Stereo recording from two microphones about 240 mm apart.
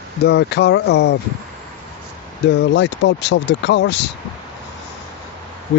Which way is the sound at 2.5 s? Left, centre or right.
Left.